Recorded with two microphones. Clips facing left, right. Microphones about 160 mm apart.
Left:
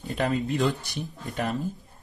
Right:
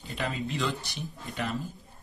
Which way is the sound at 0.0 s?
45° left (ahead or behind).